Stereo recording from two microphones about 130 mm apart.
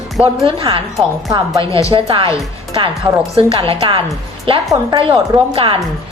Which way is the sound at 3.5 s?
40° right (ahead or behind).